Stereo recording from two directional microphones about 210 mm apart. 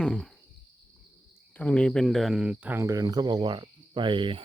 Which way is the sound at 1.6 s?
5° left (ahead or behind).